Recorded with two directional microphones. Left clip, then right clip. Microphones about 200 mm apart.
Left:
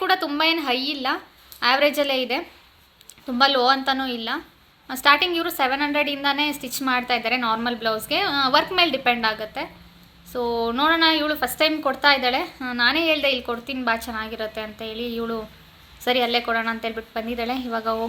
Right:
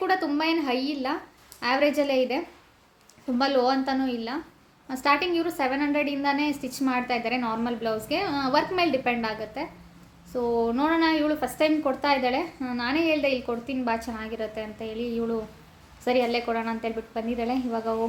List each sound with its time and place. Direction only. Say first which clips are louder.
0.0 s a woman's voice: left 4 dB; 5° left (ahead or behind)
10.3 s speech: left 1 dB; 20° left (ahead or behind)
10.7 s a woman's voice: left 5 dB; 5° left (ahead or behind)